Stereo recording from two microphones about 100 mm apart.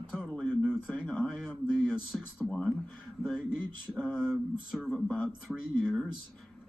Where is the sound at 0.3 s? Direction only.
15° left (ahead or behind).